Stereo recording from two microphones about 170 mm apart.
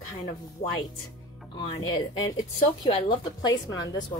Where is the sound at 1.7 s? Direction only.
25° left (ahead or behind).